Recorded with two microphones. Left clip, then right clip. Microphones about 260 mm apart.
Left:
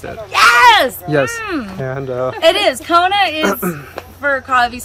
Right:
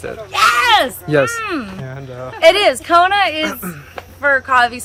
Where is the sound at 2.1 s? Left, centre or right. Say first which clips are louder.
Left 11 dB; left.